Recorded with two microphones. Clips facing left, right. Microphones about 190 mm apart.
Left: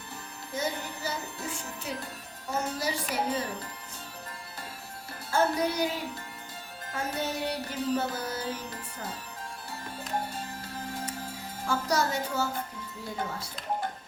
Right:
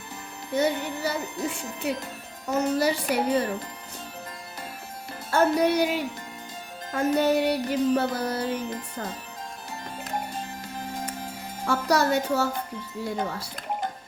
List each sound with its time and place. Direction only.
0.5 s speech: 65° right (ahead or behind)
2.5 s music: 65° right (ahead or behind)
5.3 s speech: 70° right (ahead or behind)
6.9 s music: 65° right (ahead or behind)
11.6 s speech: 70° right (ahead or behind)